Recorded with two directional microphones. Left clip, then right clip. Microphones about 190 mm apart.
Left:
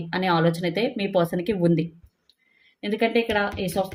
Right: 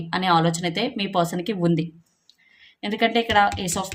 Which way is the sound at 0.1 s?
25° right (ahead or behind).